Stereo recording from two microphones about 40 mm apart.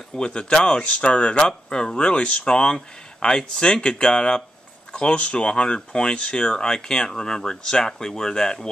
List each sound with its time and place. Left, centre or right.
0.2 s speech: left